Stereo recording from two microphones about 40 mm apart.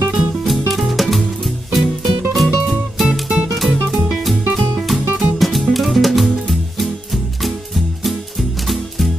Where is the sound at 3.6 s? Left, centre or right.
Centre.